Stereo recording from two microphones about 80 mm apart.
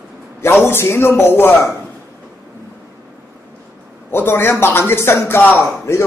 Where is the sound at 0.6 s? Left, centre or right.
Left.